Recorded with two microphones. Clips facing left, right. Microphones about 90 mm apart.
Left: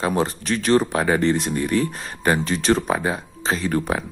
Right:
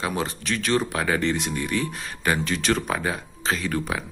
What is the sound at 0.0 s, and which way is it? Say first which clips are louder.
Speech: left 5 dB; 40° left (ahead or behind).